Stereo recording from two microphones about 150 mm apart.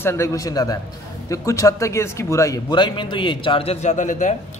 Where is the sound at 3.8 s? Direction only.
55° left (ahead or behind).